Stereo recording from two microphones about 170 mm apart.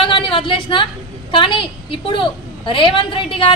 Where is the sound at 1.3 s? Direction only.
30° left (ahead or behind).